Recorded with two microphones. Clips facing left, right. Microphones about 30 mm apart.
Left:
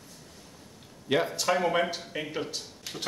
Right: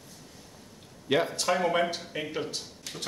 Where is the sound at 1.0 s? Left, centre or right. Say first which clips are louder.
Even; centre.